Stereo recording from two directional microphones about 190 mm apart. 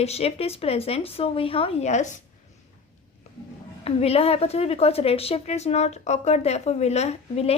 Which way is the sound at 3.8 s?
30° left (ahead or behind).